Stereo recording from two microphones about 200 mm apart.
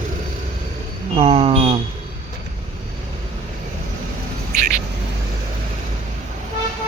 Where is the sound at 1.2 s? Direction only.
30° right (ahead or behind).